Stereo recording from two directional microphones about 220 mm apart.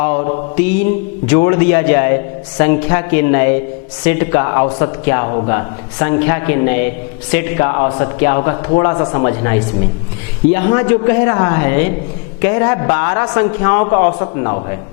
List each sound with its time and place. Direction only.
0.0 s mantra: 15° left (ahead or behind)
0.5 s a man's voice: 10° left (ahead or behind)